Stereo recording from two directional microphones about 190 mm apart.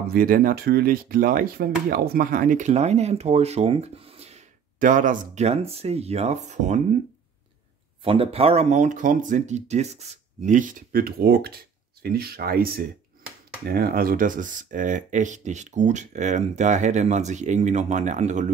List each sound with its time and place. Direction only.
0.1 s speech: 50° right (ahead or behind)
8.0 s speech: 30° right (ahead or behind)